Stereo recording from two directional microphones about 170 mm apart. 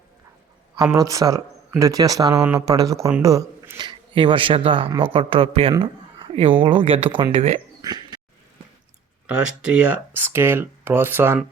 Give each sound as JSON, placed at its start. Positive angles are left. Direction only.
{"t": 0.9, "sound": "speech", "side_deg": -20}
{"t": 5.8, "sound": "a sound", "side_deg": -30}
{"t": 6.6, "sound": "speech", "side_deg": -30}
{"t": 7.8, "sound": "frog", "side_deg": -25}
{"t": 9.2, "sound": "speech", "side_deg": -5}